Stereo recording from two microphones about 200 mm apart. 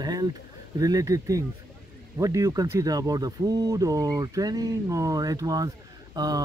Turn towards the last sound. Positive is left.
turn(degrees=-20)  # may be behind; listen again after turning